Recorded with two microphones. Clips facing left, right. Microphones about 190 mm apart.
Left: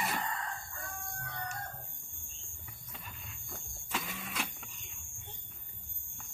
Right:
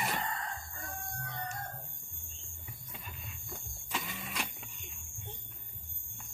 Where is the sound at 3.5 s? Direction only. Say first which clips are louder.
Left 1 dB; centre (ahead or behind).